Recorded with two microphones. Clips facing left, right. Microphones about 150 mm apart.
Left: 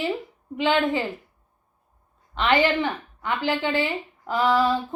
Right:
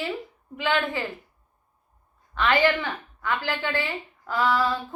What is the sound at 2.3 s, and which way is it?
A woman's voice, 20° left (ahead or behind).